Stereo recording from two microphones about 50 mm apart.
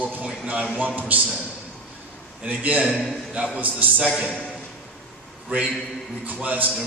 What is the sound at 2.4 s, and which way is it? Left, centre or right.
A man's voice, right.